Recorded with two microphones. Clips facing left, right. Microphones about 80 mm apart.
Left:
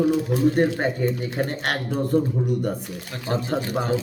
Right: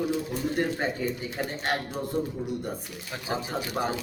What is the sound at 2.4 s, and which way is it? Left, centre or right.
Speech, left.